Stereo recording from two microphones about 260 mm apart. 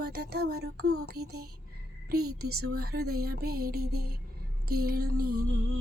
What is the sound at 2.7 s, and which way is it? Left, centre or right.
Child singing, right.